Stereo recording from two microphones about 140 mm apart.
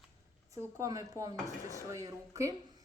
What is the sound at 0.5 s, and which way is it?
Speech, 20° right (ahead or behind).